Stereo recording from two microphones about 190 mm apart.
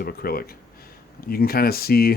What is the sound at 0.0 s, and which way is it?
Speech, 50° left (ahead or behind).